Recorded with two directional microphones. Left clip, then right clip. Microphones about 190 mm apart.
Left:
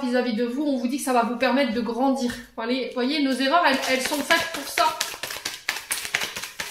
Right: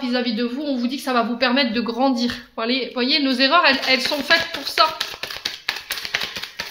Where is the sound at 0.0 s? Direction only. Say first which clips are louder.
Right 1 dB; 35° right (ahead or behind).